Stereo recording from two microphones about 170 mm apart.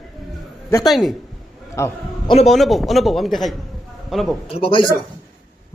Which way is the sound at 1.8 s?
15° left (ahead or behind).